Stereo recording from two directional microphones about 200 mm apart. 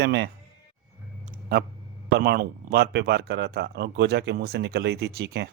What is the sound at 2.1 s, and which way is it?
Speech, 50° right (ahead or behind).